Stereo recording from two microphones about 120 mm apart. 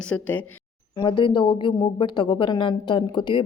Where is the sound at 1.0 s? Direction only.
40° left (ahead or behind).